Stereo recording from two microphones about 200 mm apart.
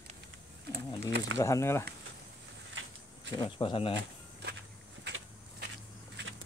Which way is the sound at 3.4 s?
25° left (ahead or behind).